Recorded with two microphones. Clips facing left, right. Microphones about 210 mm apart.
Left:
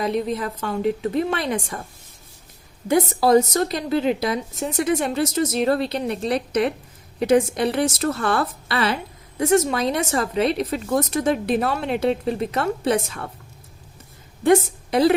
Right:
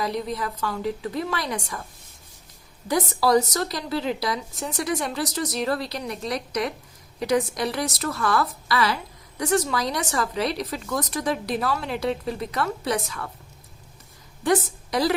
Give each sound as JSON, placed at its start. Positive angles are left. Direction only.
{"t": 0.0, "sound": "speech", "side_deg": 25}
{"t": 3.2, "sound": "speech", "side_deg": 25}
{"t": 14.8, "sound": "a sound", "side_deg": 25}